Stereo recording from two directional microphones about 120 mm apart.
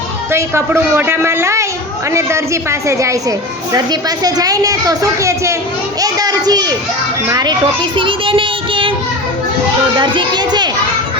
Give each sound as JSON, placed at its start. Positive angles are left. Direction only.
{"t": 0.3, "sound": "a woman's voice", "side_deg": -20}
{"t": 7.9, "sound": "child singing", "side_deg": -45}
{"t": 10.0, "sound": "a woman's voice", "side_deg": -40}